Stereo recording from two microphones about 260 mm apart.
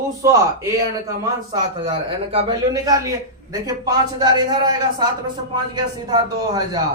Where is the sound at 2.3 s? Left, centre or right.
Centre.